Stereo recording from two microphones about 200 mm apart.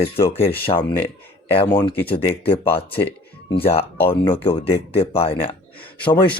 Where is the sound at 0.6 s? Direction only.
25° left (ahead or behind).